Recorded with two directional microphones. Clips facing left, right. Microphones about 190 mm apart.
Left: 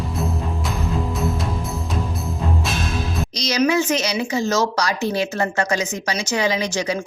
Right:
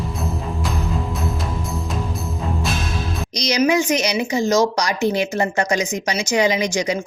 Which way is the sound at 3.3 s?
15° right (ahead or behind).